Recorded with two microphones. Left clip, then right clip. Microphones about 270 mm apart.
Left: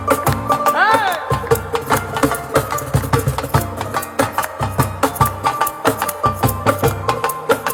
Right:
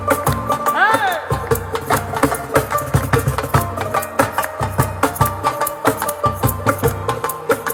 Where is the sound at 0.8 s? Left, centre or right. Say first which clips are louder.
Left 1 dB; centre.